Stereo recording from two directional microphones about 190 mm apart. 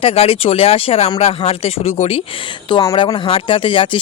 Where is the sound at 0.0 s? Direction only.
30° left (ahead or behind).